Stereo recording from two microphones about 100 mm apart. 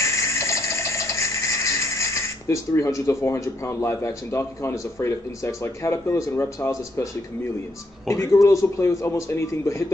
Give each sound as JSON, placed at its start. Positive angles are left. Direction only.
{"t": 0.0, "sound": "music", "side_deg": 30}
{"t": 8.1, "sound": "a man's voice", "side_deg": 30}